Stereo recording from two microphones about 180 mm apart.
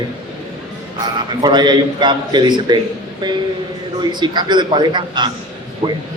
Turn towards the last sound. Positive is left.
turn(degrees=-30)  # may be behind; listen again after turning